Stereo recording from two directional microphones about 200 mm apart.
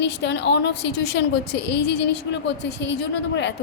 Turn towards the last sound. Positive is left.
turn(degrees=60)  # may be behind; listen again after turning